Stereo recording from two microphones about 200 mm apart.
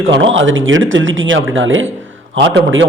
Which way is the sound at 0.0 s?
75° right (ahead or behind).